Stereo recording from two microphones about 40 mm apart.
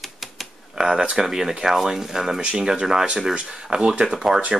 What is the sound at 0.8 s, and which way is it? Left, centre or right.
Speech, centre.